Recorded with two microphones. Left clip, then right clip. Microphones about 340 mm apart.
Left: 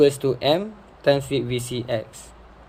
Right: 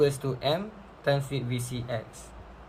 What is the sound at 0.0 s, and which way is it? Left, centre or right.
Speech, left.